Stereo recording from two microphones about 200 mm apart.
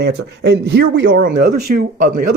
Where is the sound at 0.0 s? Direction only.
55° right (ahead or behind).